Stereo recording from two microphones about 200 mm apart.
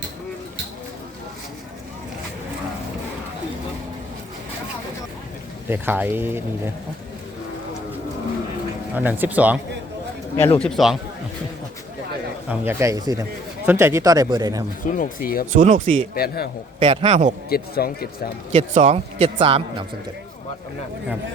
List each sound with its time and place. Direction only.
5.6 s speech: 10° right (ahead or behind)
9.0 s speech: 10° right (ahead or behind)
10.3 s speech: 30° left (ahead or behind)
10.6 s a man's voice: centre (ahead or behind)
12.5 s speech: 15° right (ahead or behind)
14.8 s speech: 45° left (ahead or behind)
15.5 s speech: 40° right (ahead or behind)
16.1 s speech: 50° left (ahead or behind)
16.8 s a man's voice: 25° right (ahead or behind)
17.5 s speech: 50° left (ahead or behind)
18.5 s a man's voice: 35° right (ahead or behind)